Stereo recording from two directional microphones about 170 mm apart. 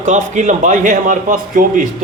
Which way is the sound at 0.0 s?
45° right (ahead or behind).